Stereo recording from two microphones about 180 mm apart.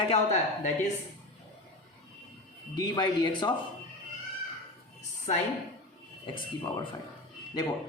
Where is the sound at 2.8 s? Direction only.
25° left (ahead or behind).